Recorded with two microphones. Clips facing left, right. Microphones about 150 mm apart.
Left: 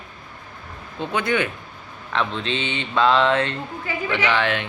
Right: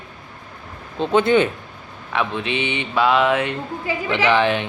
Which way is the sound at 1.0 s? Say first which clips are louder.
Right 7 dB; 25° right (ahead or behind).